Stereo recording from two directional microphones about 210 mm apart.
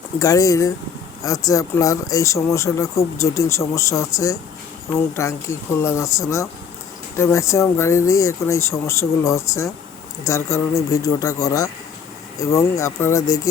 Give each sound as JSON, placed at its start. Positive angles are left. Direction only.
{"t": 0.2, "sound": "speech", "side_deg": 15}